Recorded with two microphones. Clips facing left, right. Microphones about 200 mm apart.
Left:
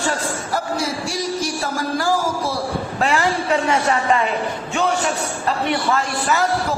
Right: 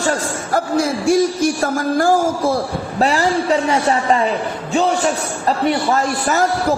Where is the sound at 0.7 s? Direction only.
55° right (ahead or behind).